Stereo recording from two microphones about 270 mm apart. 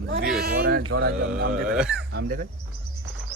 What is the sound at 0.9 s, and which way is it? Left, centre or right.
Music, right.